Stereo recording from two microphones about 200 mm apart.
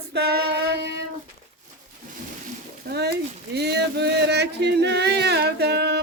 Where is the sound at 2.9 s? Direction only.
55° right (ahead or behind).